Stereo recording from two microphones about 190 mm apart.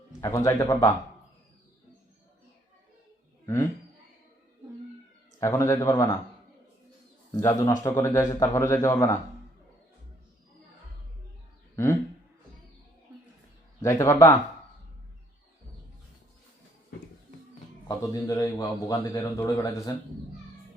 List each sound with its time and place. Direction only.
0.2 s a man's voice: 15° left (ahead or behind)
3.4 s speech: 15° left (ahead or behind)
5.4 s a man's voice: 15° left (ahead or behind)
7.3 s a man's voice: 20° left (ahead or behind)
13.8 s a man's voice: 15° left (ahead or behind)
17.8 s a man's voice: 20° left (ahead or behind)